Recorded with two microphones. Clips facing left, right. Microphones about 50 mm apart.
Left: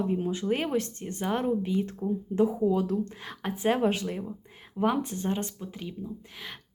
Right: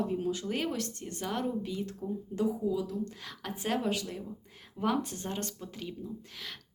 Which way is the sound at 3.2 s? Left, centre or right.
Left.